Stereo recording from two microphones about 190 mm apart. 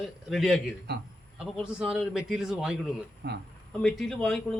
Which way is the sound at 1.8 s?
5° right (ahead or behind).